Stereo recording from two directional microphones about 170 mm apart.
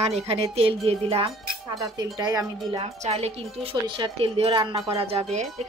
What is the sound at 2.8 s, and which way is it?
Speech, 40° right (ahead or behind).